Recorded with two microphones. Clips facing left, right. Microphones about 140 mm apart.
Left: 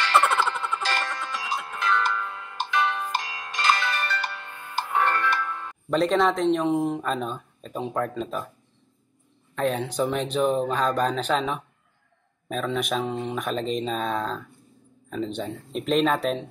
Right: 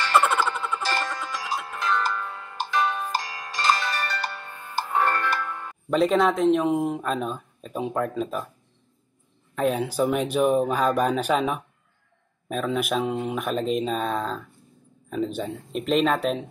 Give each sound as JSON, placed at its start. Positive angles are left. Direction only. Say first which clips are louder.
{"t": 0.1, "sound": "music", "louder": "right 1 dB", "side_deg": 0}
{"t": 3.4, "sound": "bell", "louder": "even", "side_deg": -10}
{"t": 4.3, "sound": "music", "louder": "even", "side_deg": -10}
{"t": 5.5, "sound": "music", "louder": "even", "side_deg": -15}
{"t": 5.9, "sound": "speech", "louder": "right 1 dB", "side_deg": 0}
{"t": 9.6, "sound": "speech", "louder": "right 2 dB", "side_deg": -5}